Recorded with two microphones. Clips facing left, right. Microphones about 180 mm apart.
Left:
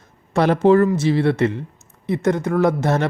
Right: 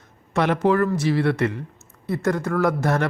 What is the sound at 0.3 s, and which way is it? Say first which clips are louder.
Speech: left 5 dB; 35° left (ahead or behind).